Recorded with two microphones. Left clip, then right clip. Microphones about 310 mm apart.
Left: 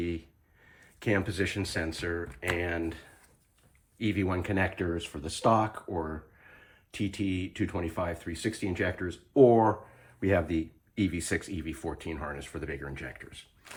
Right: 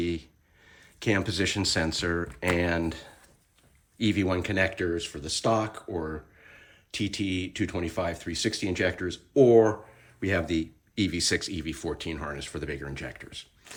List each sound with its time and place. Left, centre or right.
0.7 s speech: centre
4.8 s speech: centre
6.0 s speech: centre